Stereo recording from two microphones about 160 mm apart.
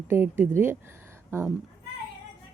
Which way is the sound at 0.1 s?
15° right (ahead or behind).